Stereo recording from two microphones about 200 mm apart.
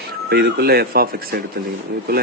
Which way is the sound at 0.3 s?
50° right (ahead or behind).